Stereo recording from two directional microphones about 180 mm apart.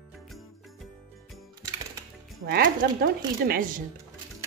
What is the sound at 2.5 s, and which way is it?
Speech, 55° right (ahead or behind).